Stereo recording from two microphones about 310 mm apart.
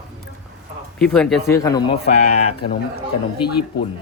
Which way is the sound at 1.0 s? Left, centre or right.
Centre.